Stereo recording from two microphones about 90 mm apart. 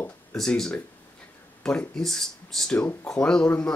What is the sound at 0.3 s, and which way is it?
Speech, 5° left (ahead or behind).